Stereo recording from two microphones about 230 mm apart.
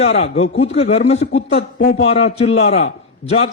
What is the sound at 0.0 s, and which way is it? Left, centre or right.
A man's voice, left.